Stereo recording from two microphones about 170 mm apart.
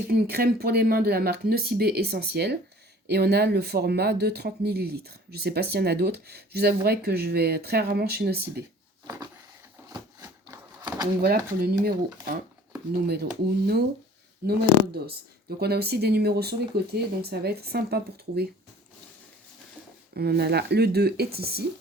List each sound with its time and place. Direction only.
0.1 s speech: 65° right (ahead or behind)
9.0 s a sound: 20° right (ahead or behind)
11.2 s speech: 65° right (ahead or behind)
14.4 s speech: 65° right (ahead or behind)
20.1 s speech: 70° right (ahead or behind)